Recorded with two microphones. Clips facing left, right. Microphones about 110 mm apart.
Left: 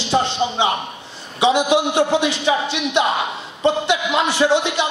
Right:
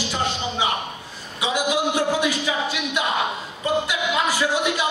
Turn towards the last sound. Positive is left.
turn(degrees=25)  # may be behind; listen again after turning